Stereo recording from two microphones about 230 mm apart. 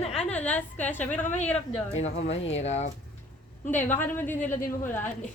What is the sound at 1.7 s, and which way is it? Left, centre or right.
Speech, left.